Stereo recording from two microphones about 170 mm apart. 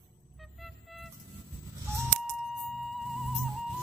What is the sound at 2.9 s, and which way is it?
Music, centre (ahead or behind).